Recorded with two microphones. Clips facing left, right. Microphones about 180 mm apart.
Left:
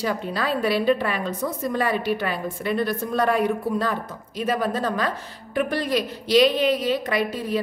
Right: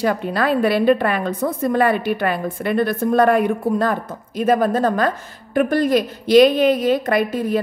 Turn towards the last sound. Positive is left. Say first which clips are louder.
# right 5 dB
turn(degrees=-50)  # may be behind; listen again after turning